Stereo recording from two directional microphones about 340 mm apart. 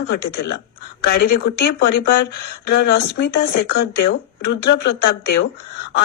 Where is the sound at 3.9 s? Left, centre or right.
Left.